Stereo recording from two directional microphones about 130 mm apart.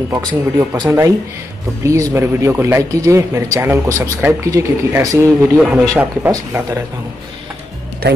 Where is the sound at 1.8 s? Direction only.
25° right (ahead or behind).